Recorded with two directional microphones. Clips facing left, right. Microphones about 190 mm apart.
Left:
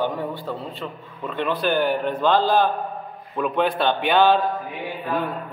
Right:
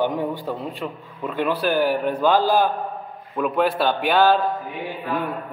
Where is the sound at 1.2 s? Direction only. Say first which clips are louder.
Right 1 dB; centre (ahead or behind).